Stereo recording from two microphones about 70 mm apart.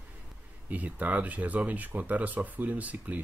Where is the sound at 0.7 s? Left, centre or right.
Right.